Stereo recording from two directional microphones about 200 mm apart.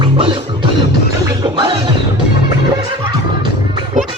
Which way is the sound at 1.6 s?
25° right (ahead or behind).